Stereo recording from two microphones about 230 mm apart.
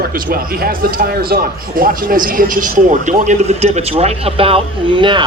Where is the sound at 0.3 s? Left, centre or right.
Right.